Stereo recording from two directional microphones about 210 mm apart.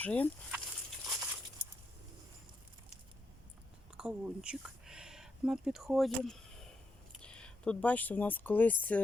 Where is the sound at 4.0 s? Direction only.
5° right (ahead or behind).